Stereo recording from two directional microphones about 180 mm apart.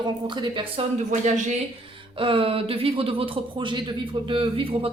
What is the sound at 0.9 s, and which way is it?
Speech, 40° right (ahead or behind).